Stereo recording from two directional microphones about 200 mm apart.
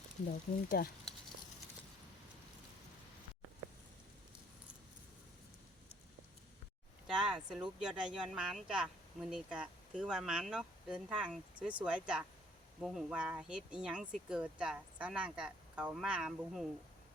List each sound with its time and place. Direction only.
0.7 s speech: 50° left (ahead or behind)
7.1 s speech: 5° right (ahead or behind)